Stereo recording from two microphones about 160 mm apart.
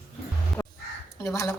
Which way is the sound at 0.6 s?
10° left (ahead or behind).